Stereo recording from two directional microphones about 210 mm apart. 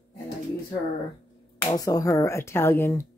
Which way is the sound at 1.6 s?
15° left (ahead or behind).